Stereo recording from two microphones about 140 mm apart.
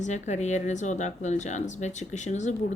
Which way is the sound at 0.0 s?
55° left (ahead or behind).